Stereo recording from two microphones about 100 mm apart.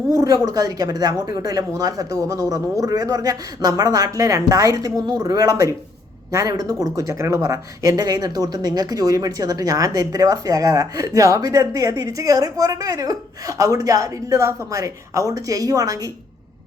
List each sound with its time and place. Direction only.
0.1 s speech: 35° right (ahead or behind)